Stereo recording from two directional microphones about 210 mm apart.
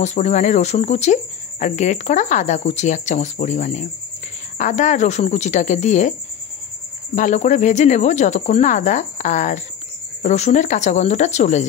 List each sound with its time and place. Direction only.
0.0 s speech: 35° left (ahead or behind)
7.2 s speech: 35° left (ahead or behind)